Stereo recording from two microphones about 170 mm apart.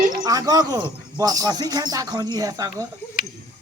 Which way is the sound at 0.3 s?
20° right (ahead or behind).